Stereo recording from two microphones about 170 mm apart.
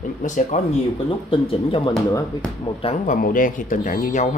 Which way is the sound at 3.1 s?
55° left (ahead or behind).